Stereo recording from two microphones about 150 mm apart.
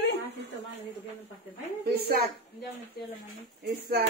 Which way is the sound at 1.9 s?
90° right.